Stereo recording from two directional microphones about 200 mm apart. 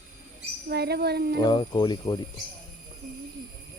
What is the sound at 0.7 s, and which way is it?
Speech, 55° right (ahead or behind).